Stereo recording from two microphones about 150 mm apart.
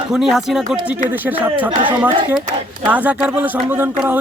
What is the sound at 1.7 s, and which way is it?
Speech, 35° right (ahead or behind).